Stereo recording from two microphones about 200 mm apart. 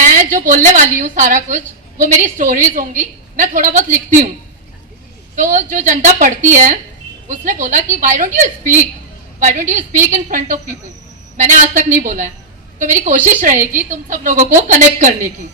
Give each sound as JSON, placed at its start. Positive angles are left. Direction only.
{"t": 0.0, "sound": "a woman's voice", "side_deg": -40}
{"t": 5.4, "sound": "a woman's voice", "side_deg": -40}